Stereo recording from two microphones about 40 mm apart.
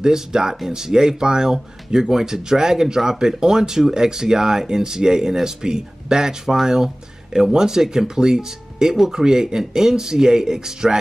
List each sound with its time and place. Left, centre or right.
0.0 s speech: centre